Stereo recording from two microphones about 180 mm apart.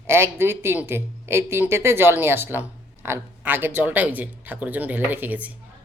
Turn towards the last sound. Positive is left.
turn(degrees=-10)  # may be behind; listen again after turning